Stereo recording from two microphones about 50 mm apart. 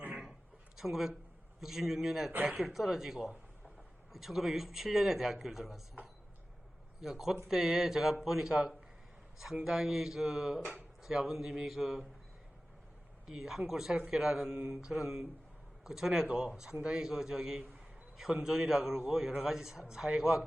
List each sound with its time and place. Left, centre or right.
0.8 s music: centre
2.3 s speech: right
2.6 s music: centre
4.1 s a man's voice: centre
7.0 s music: centre
9.6 s music: centre
13.2 s music: centre
13.9 s a man's voice: centre
16.8 s music: centre